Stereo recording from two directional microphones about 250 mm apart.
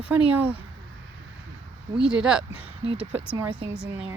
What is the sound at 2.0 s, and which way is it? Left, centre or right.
Speech, centre.